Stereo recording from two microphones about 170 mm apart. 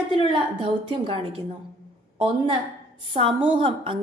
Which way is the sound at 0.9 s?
30° right (ahead or behind).